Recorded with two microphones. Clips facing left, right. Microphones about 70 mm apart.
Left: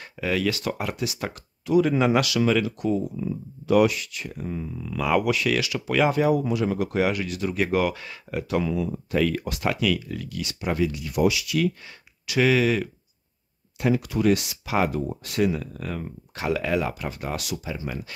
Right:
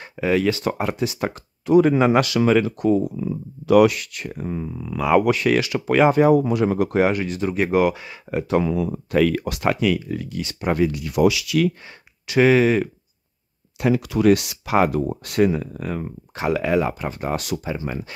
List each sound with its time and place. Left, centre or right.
0.0 s speech: right
4.7 s speech: right
5.2 s speech: right; by 8.2 s centre
8.3 s speech: right
8.7 s speech: right
9.8 s speech: right
10.6 s speech: right
11.1 s speech: right
12.3 s speech: right
13.7 s speech: right
15.6 s speech: centre